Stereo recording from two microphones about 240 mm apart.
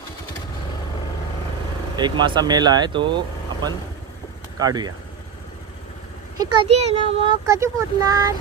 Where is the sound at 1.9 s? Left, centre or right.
Centre.